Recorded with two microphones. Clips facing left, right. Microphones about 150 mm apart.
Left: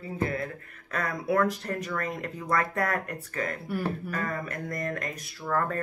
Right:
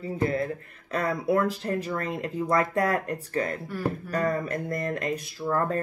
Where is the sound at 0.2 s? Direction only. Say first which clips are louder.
Right 4 dB; 30° right (ahead or behind).